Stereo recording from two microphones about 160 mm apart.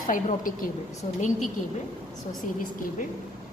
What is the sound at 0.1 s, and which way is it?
Speech, 55° left (ahead or behind).